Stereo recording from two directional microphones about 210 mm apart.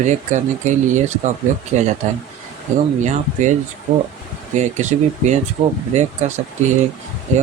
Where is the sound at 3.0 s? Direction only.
35° right (ahead or behind).